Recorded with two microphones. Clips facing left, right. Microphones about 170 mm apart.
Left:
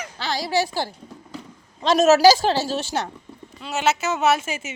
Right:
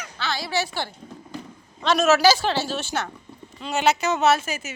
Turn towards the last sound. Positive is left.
turn(degrees=25)  # may be behind; listen again after turning